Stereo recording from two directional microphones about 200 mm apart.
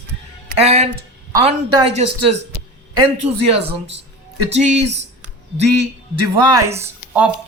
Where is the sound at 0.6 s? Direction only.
35° right (ahead or behind).